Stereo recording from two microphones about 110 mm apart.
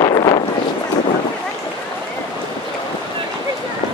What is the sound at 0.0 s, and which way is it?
Wind noise, 40° left (ahead or behind).